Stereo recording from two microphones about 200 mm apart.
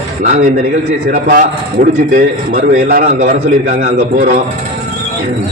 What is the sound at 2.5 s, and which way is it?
A man's voice, 45° right (ahead or behind).